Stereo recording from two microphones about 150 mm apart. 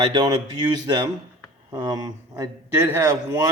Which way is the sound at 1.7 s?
25° right (ahead or behind).